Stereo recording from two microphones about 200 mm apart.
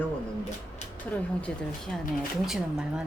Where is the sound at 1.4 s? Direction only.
5° left (ahead or behind).